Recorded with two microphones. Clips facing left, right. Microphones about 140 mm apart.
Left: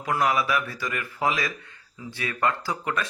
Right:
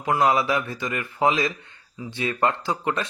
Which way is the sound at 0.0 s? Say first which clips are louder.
Right 3 dB; 25° right (ahead or behind).